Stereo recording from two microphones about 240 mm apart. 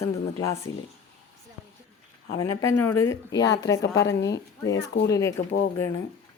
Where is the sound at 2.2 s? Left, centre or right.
Left.